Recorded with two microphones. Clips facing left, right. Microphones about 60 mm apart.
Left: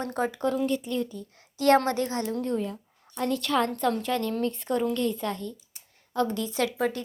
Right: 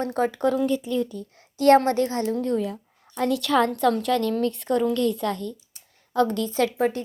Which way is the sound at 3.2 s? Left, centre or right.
Right.